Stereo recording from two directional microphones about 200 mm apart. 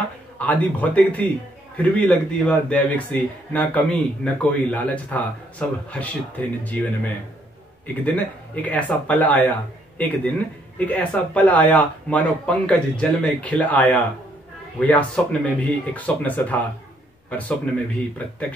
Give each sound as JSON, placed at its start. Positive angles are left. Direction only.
{"t": 0.4, "sound": "a man's voice", "side_deg": 5}